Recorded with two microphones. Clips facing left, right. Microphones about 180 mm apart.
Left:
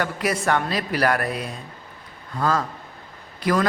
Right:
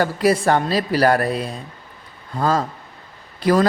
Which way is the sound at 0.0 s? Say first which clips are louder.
Right 7 dB; 30° right (ahead or behind).